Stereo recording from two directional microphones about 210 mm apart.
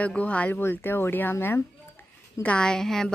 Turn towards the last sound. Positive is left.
turn(degrees=0)  # may be behind; listen again after turning